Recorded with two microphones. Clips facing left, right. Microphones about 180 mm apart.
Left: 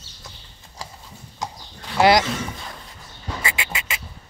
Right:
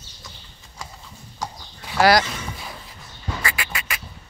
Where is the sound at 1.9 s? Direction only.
20° left (ahead or behind).